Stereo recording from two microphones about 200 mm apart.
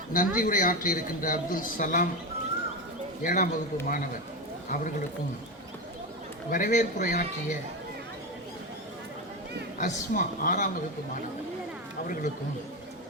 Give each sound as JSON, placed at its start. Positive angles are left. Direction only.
{"t": 0.1, "sound": "speech", "side_deg": 45}
{"t": 3.2, "sound": "speech", "side_deg": 45}
{"t": 6.5, "sound": "speech", "side_deg": 40}
{"t": 9.7, "sound": "speech", "side_deg": 40}